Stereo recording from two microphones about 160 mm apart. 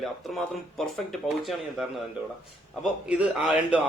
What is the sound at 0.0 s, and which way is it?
A man's voice, centre (ahead or behind).